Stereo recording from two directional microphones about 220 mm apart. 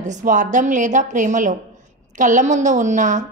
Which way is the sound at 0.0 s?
35° right (ahead or behind).